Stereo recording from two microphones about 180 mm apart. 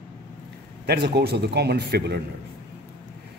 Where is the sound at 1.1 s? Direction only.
65° right (ahead or behind).